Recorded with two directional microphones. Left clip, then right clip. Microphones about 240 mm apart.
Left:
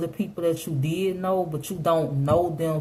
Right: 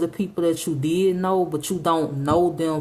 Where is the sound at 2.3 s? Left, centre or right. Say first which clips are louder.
Right 3 dB; right.